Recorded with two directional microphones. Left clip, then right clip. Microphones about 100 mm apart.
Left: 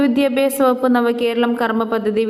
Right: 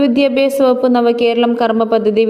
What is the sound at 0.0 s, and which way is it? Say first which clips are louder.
A woman's voice: right 4 dB; 40° right (ahead or behind).